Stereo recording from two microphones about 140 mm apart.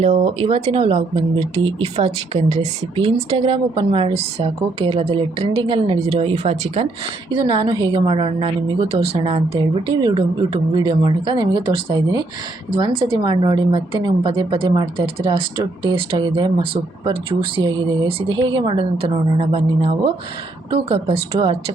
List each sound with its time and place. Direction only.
0.0 s a woman's voice: 45° right (ahead or behind)